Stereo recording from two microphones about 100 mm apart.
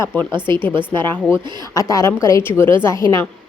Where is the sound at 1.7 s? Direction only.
35° left (ahead or behind).